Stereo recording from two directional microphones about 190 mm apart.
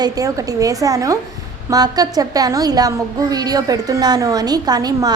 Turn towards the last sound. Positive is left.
turn(degrees=-20)  # may be behind; listen again after turning